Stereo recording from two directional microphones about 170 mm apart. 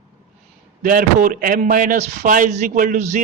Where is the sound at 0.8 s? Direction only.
50° right (ahead or behind).